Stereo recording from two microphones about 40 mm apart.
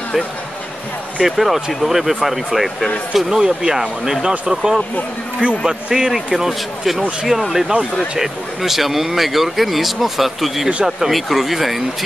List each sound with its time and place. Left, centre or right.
1.2 s speech: centre